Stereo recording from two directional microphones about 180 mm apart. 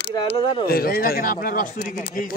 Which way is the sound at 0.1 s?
25° left (ahead or behind).